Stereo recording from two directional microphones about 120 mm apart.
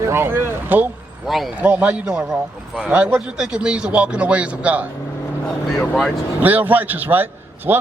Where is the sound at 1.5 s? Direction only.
10° right (ahead or behind).